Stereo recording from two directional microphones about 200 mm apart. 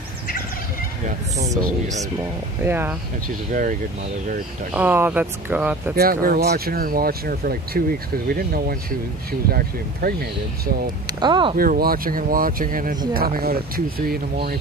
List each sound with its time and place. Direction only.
2.6 s speech: 10° right (ahead or behind)
4.7 s speech: 10° right (ahead or behind)
5.9 s speech: 50° right (ahead or behind)
11.1 s speech: 25° right (ahead or behind)
11.5 s speech: 45° right (ahead or behind)